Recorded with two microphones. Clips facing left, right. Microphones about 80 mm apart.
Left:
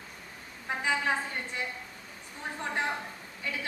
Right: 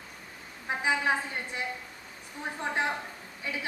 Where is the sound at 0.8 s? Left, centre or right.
Centre.